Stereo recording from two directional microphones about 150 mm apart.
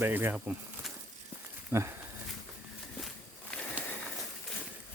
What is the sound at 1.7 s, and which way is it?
Speech, 15° right (ahead or behind).